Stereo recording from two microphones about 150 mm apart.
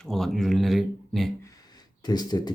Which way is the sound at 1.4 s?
25° left (ahead or behind).